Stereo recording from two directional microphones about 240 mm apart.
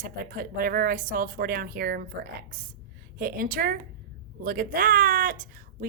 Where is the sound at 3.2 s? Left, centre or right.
Right.